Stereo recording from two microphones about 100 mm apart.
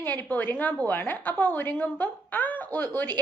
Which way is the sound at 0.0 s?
15° left (ahead or behind).